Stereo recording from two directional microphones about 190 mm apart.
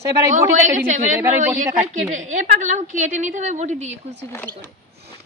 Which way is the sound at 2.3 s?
40° right (ahead or behind).